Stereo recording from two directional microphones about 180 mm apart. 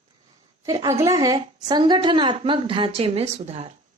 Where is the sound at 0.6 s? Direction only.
20° right (ahead or behind).